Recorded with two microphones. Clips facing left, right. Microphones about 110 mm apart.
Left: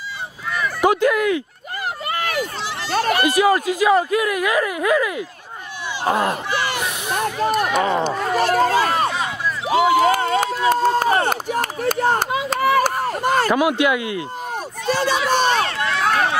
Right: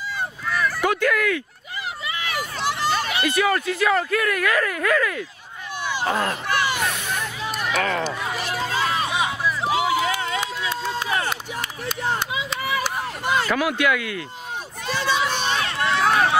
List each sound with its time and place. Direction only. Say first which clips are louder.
0.7 s speech: left 7 dB; 20° left (ahead or behind)
2.0 s a sound: left 6 dB; 50° left (ahead or behind)
2.9 s speech: left 5 dB; 50° left (ahead or behind)
3.3 s speech: left 2 dB; 15° left (ahead or behind)
6.8 s vehicle: left 3 dB; 15° left (ahead or behind)
7.2 s a sound: left 8 dB; 50° left (ahead or behind)
7.8 s speech: left 5 dB; 20° left (ahead or behind)
8.1 s a sound: left 9 dB; 45° left (ahead or behind)
13.5 s speech: left 4 dB; 20° left (ahead or behind)
14.9 s run: left 4 dB; 45° left (ahead or behind)
16.0 s run: even; centre (ahead or behind)